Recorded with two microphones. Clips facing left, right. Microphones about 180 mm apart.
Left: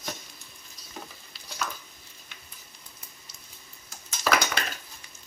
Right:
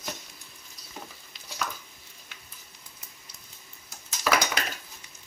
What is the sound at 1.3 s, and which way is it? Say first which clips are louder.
Stir: even; 20° right (ahead or behind).